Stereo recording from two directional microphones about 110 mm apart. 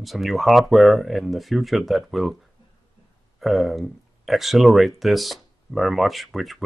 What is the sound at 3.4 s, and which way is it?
Speech, centre (ahead or behind).